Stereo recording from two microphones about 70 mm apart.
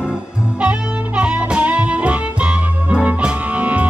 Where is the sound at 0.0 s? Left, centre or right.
Centre.